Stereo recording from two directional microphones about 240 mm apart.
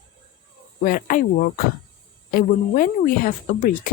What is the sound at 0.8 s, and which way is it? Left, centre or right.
Speech, left.